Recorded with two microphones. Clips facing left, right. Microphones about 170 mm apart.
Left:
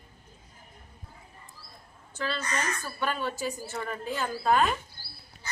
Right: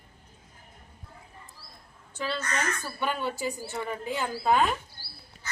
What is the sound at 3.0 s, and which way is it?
Speech, 15° right (ahead or behind).